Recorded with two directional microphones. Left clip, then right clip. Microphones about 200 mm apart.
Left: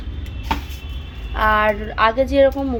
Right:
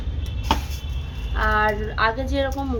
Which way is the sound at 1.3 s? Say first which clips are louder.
Left 4 dB; 20° left (ahead or behind).